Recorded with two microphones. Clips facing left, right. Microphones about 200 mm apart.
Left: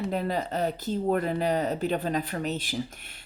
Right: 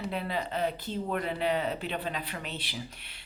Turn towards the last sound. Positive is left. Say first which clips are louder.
# left 8 dB
turn(degrees=45)  # may be behind; listen again after turning